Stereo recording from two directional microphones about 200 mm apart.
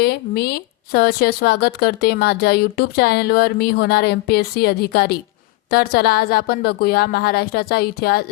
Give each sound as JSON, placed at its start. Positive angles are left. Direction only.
{"t": 0.0, "sound": "speech", "side_deg": 50}